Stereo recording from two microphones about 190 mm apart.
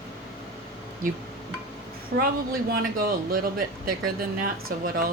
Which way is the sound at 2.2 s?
50° right (ahead or behind).